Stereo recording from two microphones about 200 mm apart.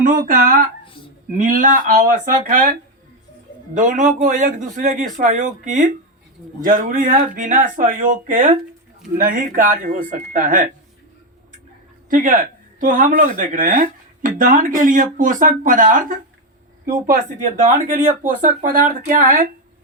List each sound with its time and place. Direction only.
0.0 s speech: 40° right (ahead or behind)
3.8 s speech: 40° right (ahead or behind)
12.1 s speech: 40° right (ahead or behind)